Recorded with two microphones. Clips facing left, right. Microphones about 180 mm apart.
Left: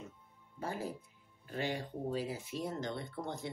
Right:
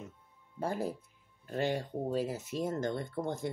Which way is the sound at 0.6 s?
45° right (ahead or behind).